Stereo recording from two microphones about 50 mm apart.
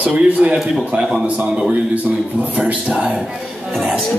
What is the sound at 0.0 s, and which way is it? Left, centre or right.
A man's voice, right.